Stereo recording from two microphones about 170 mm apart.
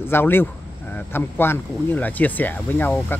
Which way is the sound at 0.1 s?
15° left (ahead or behind).